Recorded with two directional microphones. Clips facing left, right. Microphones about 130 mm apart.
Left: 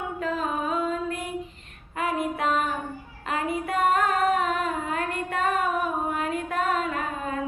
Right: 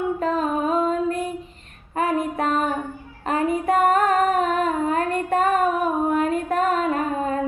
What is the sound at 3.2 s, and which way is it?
Female singing, 35° right (ahead or behind).